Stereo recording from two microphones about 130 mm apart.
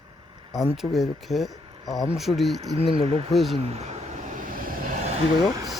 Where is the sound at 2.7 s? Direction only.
45° right (ahead or behind).